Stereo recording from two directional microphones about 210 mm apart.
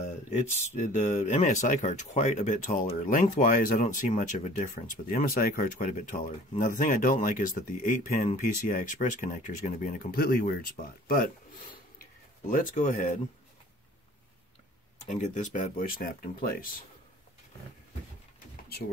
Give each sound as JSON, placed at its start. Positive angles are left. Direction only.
{"t": 0.6, "sound": "speech", "side_deg": 30}
{"t": 12.4, "sound": "speech", "side_deg": 40}
{"t": 15.0, "sound": "speech", "side_deg": 35}